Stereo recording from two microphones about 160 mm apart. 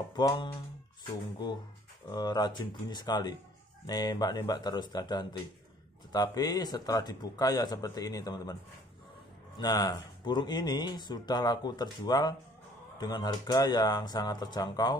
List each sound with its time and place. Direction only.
0.1 s speech: 25° left (ahead or behind)
2.0 s speech: 25° left (ahead or behind)
9.6 s speech: 25° left (ahead or behind)